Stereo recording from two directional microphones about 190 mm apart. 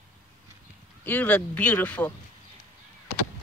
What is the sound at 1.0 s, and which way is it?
Speech, 10° left (ahead or behind).